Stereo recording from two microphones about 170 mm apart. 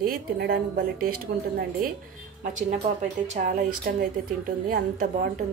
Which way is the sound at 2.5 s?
45° right (ahead or behind).